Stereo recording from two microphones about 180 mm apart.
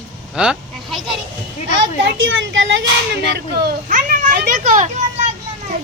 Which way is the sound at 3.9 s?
45° right (ahead or behind).